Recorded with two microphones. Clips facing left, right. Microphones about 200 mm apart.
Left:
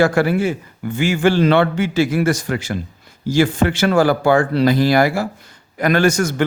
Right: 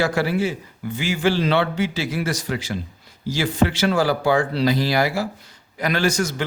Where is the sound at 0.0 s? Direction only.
50° left (ahead or behind).